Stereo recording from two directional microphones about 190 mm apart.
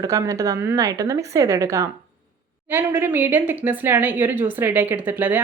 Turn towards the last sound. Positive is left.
turn(degrees=-10)  # may be behind; listen again after turning